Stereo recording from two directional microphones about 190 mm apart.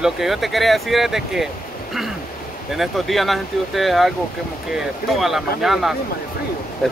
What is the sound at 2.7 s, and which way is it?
Speech, centre (ahead or behind).